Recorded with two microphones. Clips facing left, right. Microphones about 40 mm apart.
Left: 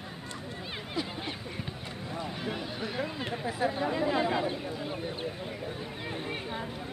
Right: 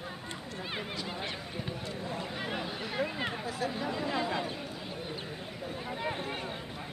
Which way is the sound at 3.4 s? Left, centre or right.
Left.